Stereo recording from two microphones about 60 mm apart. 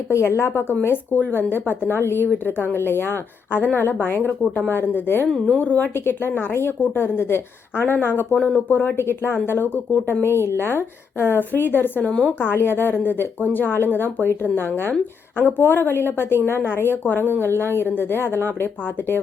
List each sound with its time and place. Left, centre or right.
0.1 s speech: left
8.4 s speech: left
9.0 s speech: left
10.2 s speech: left
12.3 s speech: left